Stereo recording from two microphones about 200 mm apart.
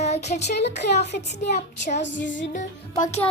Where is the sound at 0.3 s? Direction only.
55° left (ahead or behind).